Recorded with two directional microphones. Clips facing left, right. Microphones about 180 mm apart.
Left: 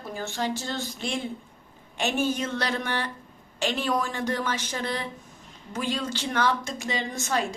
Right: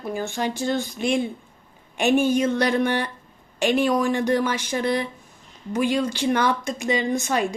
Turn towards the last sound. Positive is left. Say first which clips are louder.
# right 6 dB
turn(degrees=-15)  # may be behind; listen again after turning